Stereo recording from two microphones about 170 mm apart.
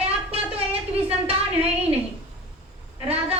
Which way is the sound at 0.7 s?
10° right (ahead or behind).